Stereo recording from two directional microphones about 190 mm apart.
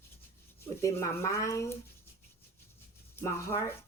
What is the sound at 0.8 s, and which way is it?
Speech, 15° left (ahead or behind).